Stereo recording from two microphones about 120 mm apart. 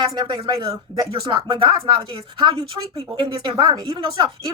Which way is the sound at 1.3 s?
45° right (ahead or behind).